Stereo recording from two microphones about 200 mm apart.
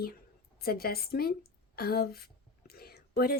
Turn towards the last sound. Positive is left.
turn(degrees=50)  # may be behind; listen again after turning